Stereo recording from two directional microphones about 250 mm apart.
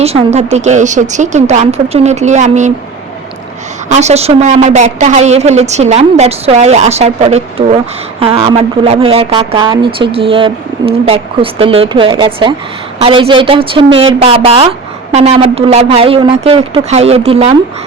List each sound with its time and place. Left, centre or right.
0.0 s a woman's voice: right
3.8 s a woman's voice: right